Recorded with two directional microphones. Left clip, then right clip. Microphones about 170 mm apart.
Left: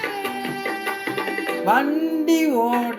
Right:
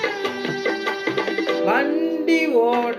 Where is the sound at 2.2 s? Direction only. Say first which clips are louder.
Right 1 dB; 45° left (ahead or behind).